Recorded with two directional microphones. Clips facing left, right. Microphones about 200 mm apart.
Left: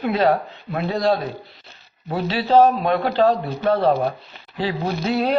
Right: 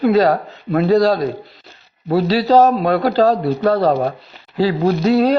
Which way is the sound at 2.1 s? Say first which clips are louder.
Right 4 dB; 35° right (ahead or behind).